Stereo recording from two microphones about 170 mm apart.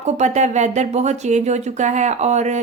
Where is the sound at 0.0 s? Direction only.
45° right (ahead or behind).